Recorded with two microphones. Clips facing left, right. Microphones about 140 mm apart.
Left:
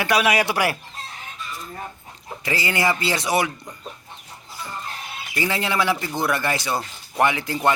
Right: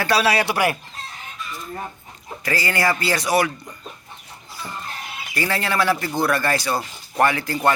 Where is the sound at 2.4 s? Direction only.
20° left (ahead or behind).